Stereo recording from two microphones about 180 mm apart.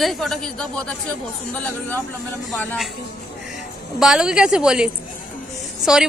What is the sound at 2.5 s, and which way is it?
Speech, centre (ahead or behind).